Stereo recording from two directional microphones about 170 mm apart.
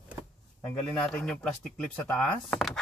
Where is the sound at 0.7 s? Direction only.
5° left (ahead or behind).